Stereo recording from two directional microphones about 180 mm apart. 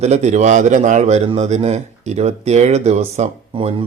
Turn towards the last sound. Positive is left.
turn(degrees=-30)  # may be behind; listen again after turning